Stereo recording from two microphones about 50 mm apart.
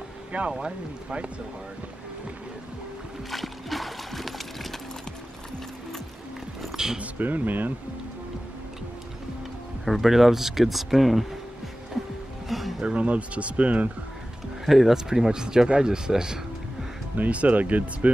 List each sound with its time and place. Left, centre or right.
0.5 s speech: centre
3.3 s music: centre
6.6 s a sound: centre
7.2 s speech: right
9.8 s speech: centre
12.4 s a sound: centre
12.8 s speech: right
14.7 s speech: centre
17.2 s speech: right